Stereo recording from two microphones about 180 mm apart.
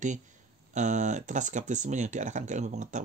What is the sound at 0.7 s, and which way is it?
Speech, 40° right (ahead or behind).